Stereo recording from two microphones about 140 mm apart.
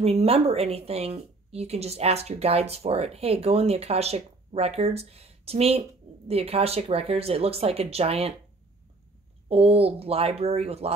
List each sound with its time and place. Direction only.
0.0 s a woman's voice: 45° right (ahead or behind)
9.5 s a woman's voice: 45° right (ahead or behind)